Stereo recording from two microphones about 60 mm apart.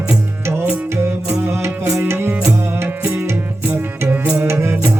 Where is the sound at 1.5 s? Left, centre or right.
Right.